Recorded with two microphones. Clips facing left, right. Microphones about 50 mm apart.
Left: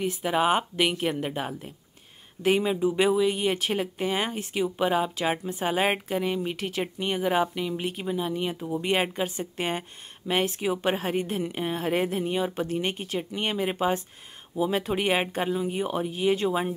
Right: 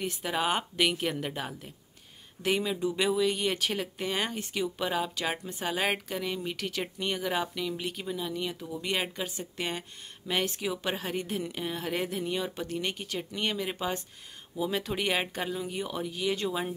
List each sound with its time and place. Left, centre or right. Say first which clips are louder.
0.0 s speech: left 6 dB; centre